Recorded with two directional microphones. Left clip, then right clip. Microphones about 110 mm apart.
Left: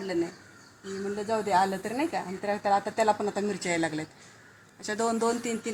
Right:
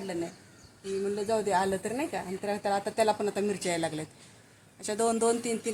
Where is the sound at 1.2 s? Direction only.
25° right (ahead or behind).